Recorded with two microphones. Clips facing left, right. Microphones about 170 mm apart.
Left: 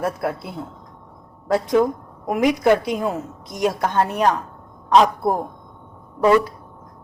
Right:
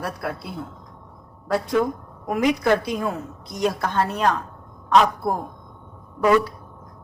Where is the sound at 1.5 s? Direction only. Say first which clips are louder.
Left 4 dB; 20° left (ahead or behind).